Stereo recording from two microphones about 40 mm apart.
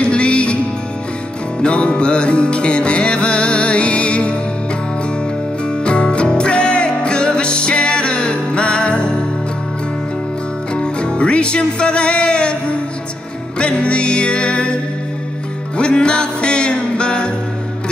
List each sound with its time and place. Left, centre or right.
0.0 s music: left
1.6 s music: left
5.7 s music: left
10.7 s music: left
15.8 s music: left